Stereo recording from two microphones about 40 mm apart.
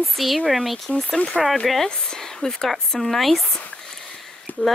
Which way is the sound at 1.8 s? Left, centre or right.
Centre.